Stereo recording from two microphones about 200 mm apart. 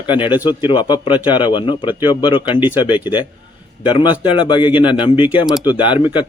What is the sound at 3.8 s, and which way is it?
A man's voice, 25° left (ahead or behind).